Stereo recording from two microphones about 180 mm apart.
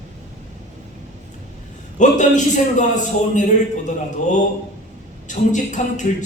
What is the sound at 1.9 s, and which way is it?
Speech, 45° left (ahead or behind).